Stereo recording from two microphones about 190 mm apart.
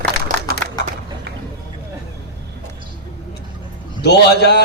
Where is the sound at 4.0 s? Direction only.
60° left (ahead or behind).